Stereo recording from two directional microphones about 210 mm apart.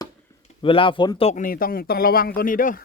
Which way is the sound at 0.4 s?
25° left (ahead or behind).